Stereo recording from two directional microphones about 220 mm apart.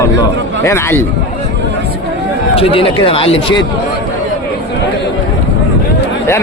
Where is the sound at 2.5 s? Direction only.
25° left (ahead or behind).